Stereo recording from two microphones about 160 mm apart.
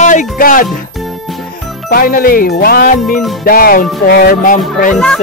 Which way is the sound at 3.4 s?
65° left (ahead or behind).